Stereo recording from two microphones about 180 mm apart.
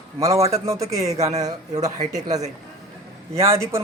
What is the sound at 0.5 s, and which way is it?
Speech, 15° right (ahead or behind).